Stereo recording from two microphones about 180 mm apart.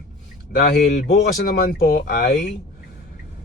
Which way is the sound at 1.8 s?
60° left (ahead or behind).